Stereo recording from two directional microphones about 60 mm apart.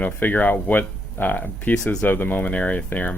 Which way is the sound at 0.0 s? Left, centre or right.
Left.